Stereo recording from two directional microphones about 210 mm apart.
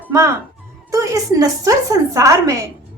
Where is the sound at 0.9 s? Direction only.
15° right (ahead or behind).